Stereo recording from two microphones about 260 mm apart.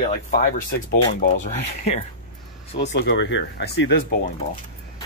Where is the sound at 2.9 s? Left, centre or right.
Left.